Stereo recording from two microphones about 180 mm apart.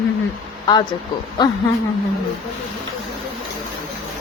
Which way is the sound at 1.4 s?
25° left (ahead or behind).